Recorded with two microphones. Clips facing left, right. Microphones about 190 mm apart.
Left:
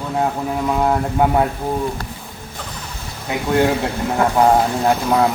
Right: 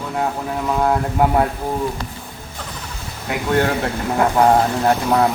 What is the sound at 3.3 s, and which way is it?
Speech, 15° left (ahead or behind).